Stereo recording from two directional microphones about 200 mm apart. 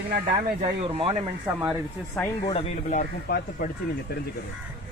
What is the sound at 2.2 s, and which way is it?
Speech, 5° left (ahead or behind).